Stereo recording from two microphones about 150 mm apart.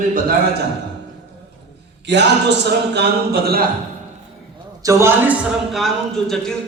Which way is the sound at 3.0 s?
90° right.